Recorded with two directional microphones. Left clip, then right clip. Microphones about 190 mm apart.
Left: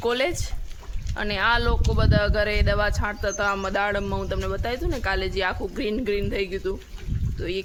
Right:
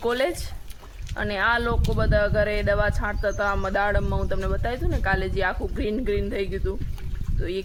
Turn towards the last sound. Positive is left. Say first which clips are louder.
# left 1 dB
turn(degrees=5)  # may be behind; listen again after turning